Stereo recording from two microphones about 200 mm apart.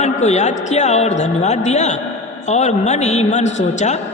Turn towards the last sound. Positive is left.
turn(degrees=35)  # may be behind; listen again after turning